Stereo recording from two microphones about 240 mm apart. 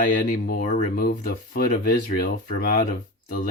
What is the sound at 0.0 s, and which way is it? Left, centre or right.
Speech, left.